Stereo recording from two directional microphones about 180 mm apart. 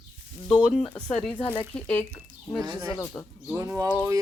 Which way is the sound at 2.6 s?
20° right (ahead or behind).